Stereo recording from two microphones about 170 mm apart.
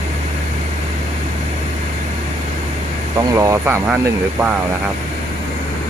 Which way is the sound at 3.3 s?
15° right (ahead or behind).